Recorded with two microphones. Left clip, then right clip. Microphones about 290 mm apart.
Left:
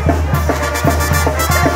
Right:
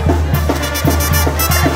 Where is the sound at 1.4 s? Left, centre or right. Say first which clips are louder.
Left 1 dB; left.